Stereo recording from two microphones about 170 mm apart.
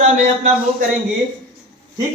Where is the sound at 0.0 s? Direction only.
45° right (ahead or behind).